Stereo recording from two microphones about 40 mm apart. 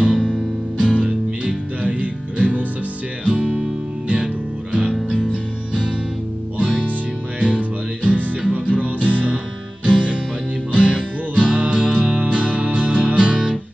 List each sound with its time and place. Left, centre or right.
0.0 s music: right
0.9 s music: right
3.3 s music: right
5.1 s music: right
7.3 s music: right
8.4 s music: right
9.8 s music: right